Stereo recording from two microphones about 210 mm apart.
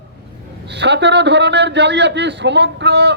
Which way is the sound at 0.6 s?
55° right (ahead or behind).